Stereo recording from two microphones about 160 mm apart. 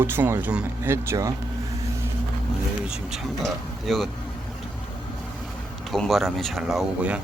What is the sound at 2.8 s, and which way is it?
Speech, centre (ahead or behind).